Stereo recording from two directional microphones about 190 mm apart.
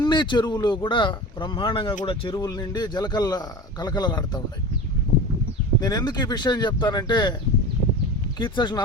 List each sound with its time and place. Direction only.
0.0 s speech: 25° left (ahead or behind)
5.8 s speech: 20° left (ahead or behind)
8.4 s speech: 25° left (ahead or behind)